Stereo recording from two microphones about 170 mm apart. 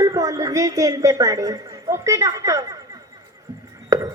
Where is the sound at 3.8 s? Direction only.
20° right (ahead or behind).